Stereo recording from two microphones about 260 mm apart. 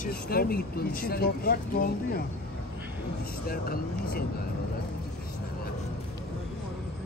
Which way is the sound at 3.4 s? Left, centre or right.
Left.